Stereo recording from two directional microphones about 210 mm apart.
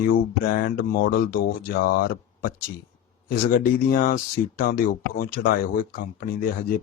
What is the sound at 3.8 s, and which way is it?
Speech, 40° left (ahead or behind).